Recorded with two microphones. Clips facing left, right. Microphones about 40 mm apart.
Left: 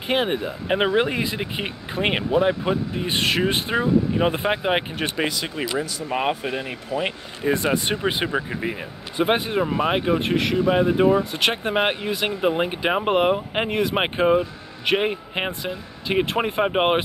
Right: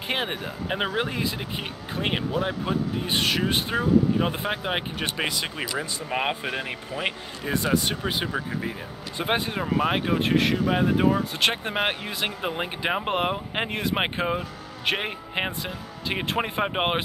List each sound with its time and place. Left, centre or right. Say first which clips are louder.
0.1 s speech: left 6 dB; centre
0.4 s speech: left 6 dB; left
5.1 s speech: left 3 dB; centre
7.5 s speech: right 1 dB; left; by 17.0 s centre